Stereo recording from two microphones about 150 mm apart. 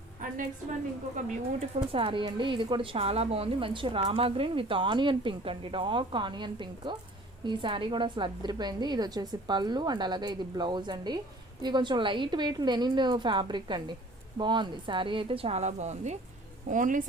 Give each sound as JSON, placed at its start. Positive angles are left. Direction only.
{"t": 1.1, "sound": "a woman's voice", "side_deg": -40}
{"t": 16.6, "sound": "a woman's voice", "side_deg": -60}